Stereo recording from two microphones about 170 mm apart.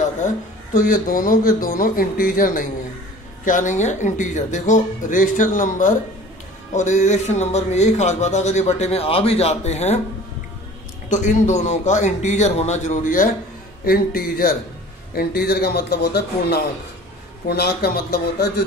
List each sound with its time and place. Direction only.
0.7 s speech: 55° left (ahead or behind)
11.1 s speech: 45° left (ahead or behind); by 18.5 s 65° left (ahead or behind)